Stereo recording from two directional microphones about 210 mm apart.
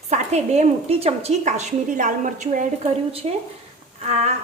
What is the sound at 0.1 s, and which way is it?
A woman's voice, 30° right (ahead or behind).